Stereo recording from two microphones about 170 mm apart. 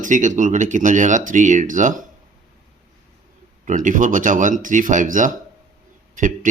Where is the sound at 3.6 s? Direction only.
50° right (ahead or behind).